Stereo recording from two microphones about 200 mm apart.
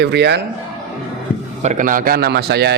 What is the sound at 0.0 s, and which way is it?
Speech, 60° right (ahead or behind).